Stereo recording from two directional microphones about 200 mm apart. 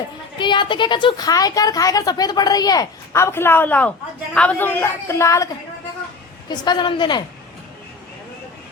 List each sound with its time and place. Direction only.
0.3 s a woman's voice: 25° left (ahead or behind)
6.5 s a woman's voice: 20° left (ahead or behind)